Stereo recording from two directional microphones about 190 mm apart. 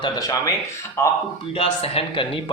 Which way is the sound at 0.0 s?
20° left (ahead or behind).